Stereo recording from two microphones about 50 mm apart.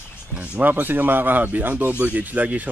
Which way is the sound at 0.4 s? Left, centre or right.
Right.